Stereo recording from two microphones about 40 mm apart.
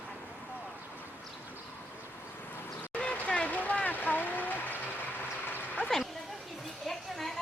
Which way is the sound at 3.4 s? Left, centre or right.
Left.